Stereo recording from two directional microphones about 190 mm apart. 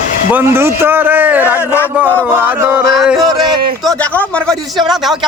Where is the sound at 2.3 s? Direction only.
10° right (ahead or behind).